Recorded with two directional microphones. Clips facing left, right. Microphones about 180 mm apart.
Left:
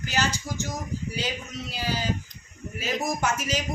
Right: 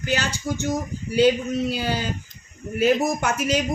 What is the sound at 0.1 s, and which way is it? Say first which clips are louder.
A man's voice: right 4 dB; 60° right (ahead or behind).